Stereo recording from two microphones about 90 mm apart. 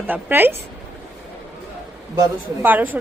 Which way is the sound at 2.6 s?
20° right (ahead or behind).